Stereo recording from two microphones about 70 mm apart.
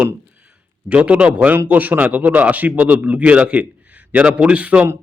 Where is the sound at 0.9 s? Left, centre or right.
Centre.